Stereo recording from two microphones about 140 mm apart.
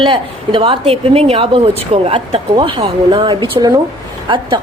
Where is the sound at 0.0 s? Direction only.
35° right (ahead or behind).